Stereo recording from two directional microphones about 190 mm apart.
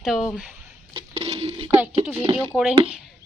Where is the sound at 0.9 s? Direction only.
30° right (ahead or behind).